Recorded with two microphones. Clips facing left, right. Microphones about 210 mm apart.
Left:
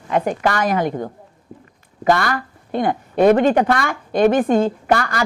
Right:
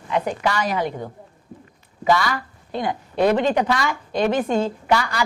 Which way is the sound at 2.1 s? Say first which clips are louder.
Left 2 dB; 55° left (ahead or behind).